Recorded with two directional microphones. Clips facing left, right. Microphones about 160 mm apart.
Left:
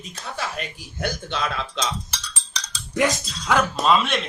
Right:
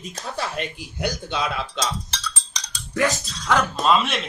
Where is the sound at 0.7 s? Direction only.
15° right (ahead or behind).